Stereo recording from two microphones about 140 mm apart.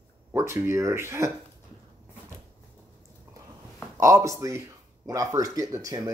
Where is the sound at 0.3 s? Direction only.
20° right (ahead or behind).